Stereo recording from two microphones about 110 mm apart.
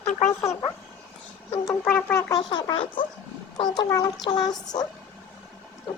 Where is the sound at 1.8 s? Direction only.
15° left (ahead or behind).